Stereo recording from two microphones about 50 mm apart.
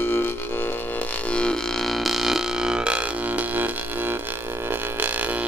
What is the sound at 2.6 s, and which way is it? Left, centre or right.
Music, centre.